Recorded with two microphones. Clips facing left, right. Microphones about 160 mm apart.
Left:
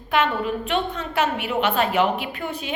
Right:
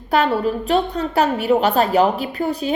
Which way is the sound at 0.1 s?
35° right (ahead or behind).